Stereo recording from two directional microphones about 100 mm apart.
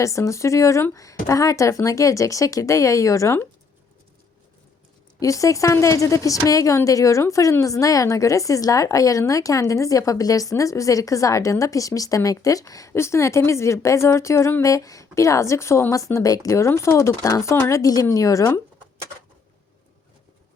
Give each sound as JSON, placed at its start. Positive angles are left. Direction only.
{"t": 0.0, "sound": "a woman's voice", "side_deg": 30}
{"t": 5.2, "sound": "a woman's voice", "side_deg": 35}